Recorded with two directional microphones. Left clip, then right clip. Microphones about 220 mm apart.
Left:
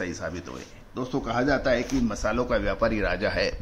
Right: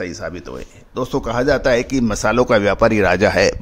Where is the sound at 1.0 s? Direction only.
55° right (ahead or behind).